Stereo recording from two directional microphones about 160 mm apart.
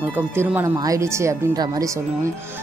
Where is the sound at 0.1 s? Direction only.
10° right (ahead or behind).